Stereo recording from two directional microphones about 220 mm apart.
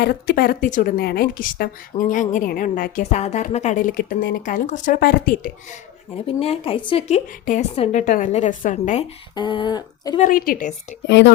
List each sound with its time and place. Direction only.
0.0 s a woman's voice: 45° left (ahead or behind)
6.2 s a woman's voice: 25° left (ahead or behind)
9.3 s speech: 20° left (ahead or behind)
10.2 s a woman's voice: 40° left (ahead or behind)
11.0 s speech: 55° left (ahead or behind)